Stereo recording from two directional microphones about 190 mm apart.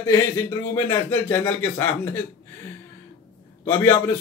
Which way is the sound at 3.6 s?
10° left (ahead or behind).